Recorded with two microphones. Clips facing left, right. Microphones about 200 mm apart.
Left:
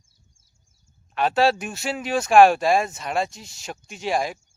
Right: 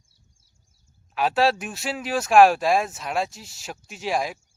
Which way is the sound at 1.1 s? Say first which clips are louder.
Left 1 dB; 5° right (ahead or behind).